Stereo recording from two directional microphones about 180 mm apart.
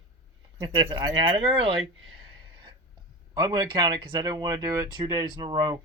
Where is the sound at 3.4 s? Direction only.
20° right (ahead or behind).